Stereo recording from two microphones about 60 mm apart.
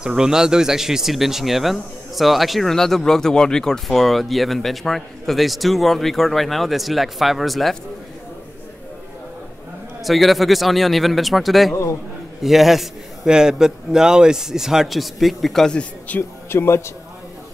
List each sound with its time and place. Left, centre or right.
0.0 s speech: centre
10.0 s speech: centre
11.7 s a man's voice: left
12.4 s a man's voice: centre
16.1 s speech: left
16.4 s a man's voice: left